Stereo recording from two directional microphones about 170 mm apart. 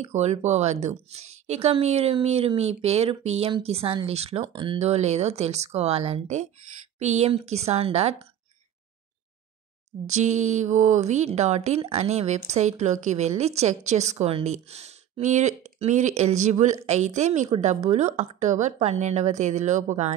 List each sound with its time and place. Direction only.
0.0 s a woman's voice: 40° right (ahead or behind)
4.5 s speech: 25° right (ahead or behind)
4.7 s a woman's voice: 40° right (ahead or behind)
10.0 s a woman's voice: 45° right (ahead or behind)